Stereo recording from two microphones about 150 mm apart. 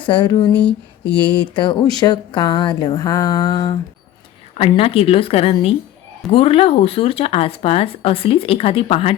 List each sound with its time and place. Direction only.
0.0 s speech: 30° left (ahead or behind)
4.5 s speech: 40° left (ahead or behind)